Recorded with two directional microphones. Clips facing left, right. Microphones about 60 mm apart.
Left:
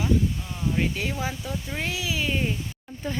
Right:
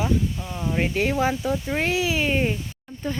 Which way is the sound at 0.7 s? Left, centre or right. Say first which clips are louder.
Right 3 dB; right.